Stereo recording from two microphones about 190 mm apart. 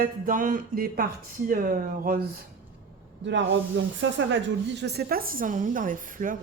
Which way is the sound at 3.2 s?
70° right (ahead or behind).